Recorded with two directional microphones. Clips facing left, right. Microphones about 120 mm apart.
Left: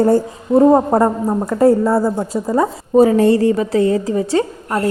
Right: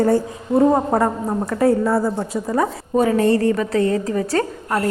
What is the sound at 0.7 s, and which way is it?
Speech, 20° left (ahead or behind).